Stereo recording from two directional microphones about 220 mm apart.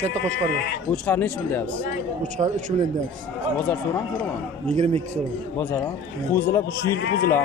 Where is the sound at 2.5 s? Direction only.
35° right (ahead or behind).